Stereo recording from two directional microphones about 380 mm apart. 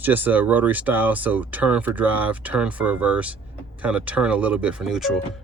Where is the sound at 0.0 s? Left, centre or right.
Centre.